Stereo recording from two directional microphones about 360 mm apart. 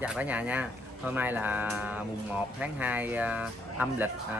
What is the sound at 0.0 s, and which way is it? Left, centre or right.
Speech, centre.